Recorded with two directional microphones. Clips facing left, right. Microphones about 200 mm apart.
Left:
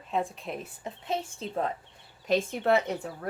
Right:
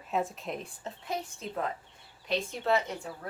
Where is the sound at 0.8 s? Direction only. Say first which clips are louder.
Left 4 dB; 25° left (ahead or behind).